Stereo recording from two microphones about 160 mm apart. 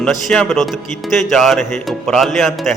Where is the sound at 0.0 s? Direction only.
5° left (ahead or behind).